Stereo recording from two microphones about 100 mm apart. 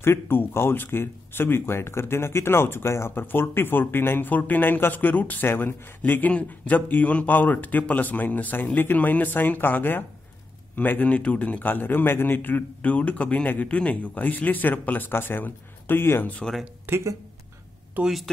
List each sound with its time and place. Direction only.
0.0 s a man's voice: 20° left (ahead or behind)
16.8 s speech: 25° right (ahead or behind)
17.9 s speech: 5° right (ahead or behind)